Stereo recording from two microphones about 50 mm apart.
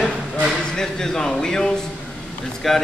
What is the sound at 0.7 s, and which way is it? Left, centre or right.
A man's voice, centre.